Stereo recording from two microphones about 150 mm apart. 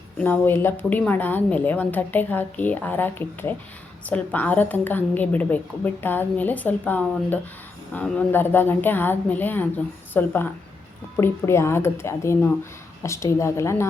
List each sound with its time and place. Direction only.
0.2 s a woman's voice: 15° left (ahead or behind)